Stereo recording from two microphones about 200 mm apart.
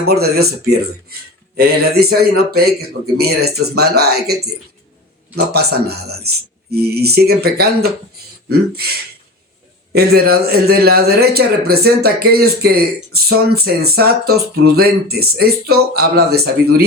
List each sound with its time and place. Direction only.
0.0 s speech: 55° right (ahead or behind)
1.5 s speech: 50° right (ahead or behind)
9.9 s speech: 50° right (ahead or behind)